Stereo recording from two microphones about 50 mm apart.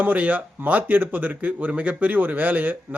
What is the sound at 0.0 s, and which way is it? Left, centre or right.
Speech, right.